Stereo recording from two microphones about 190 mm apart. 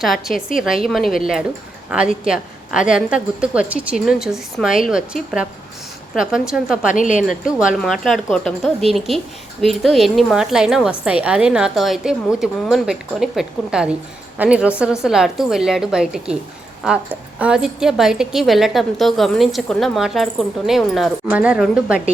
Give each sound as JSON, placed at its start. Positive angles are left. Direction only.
{"t": 0.0, "sound": "speech", "side_deg": 0}
{"t": 6.9, "sound": "a woman's voice", "side_deg": 40}
{"t": 7.8, "sound": "a woman's voice", "side_deg": 0}
{"t": 17.4, "sound": "speech", "side_deg": -5}